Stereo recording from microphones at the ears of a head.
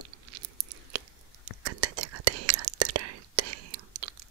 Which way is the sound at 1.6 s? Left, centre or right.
Right.